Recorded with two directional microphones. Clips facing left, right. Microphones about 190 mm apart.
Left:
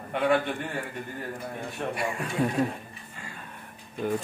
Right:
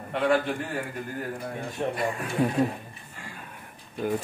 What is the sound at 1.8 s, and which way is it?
Speech, 20° right (ahead or behind).